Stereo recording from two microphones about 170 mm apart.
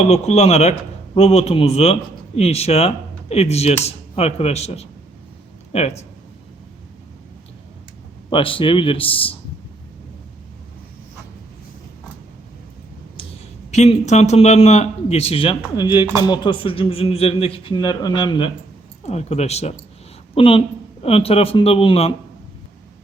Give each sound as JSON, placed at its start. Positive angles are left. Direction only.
{"t": 0.0, "sound": "a man's voice", "side_deg": 40}
{"t": 8.3, "sound": "a man's voice", "side_deg": 30}
{"t": 13.7, "sound": "a man's voice", "side_deg": 40}
{"t": 19.0, "sound": "a man's voice", "side_deg": 40}